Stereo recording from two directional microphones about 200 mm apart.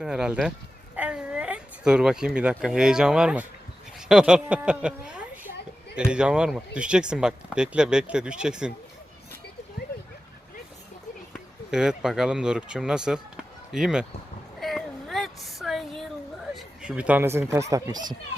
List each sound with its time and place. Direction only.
0.0 s speech: 5° right (ahead or behind)
11.7 s speech: 5° right (ahead or behind)
14.6 s a sound: centre (ahead or behind)
17.5 s speech: 15° right (ahead or behind)